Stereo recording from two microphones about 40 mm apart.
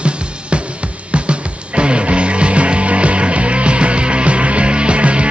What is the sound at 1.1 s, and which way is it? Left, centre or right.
Music, right.